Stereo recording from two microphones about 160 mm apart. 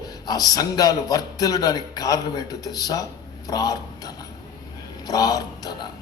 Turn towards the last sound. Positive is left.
turn(degrees=25)  # may be behind; listen again after turning